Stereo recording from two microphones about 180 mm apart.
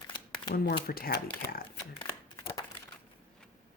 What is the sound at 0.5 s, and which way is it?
Speech, 60° left (ahead or behind).